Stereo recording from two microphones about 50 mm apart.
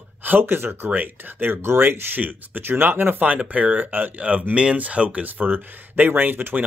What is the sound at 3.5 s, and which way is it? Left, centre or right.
Speech, right.